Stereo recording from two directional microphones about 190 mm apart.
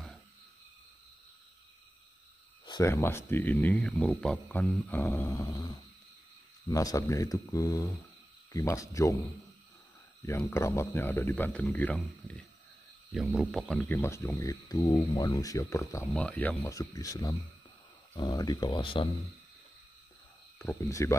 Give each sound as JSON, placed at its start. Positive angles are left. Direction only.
{"t": 2.6, "sound": "speech", "side_deg": 20}
{"t": 10.2, "sound": "speech", "side_deg": 15}
{"t": 16.1, "sound": "speech", "side_deg": 0}
{"t": 20.5, "sound": "speech", "side_deg": 10}